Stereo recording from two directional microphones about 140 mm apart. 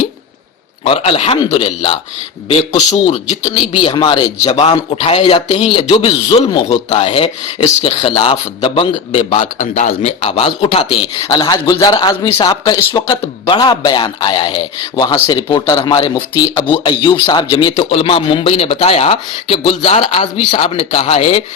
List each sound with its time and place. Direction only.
0.9 s a man's voice: 40° left (ahead or behind)
4.5 s a man's voice: 45° left (ahead or behind)
9.4 s speech: 60° left (ahead or behind); by 10.8 s 45° left (ahead or behind)
10.9 s a man's voice: 30° left (ahead or behind)